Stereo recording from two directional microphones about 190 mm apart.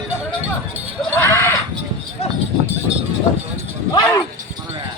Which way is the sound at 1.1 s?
15° left (ahead or behind).